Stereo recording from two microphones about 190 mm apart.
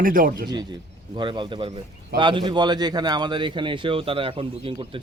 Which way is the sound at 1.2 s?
25° right (ahead or behind).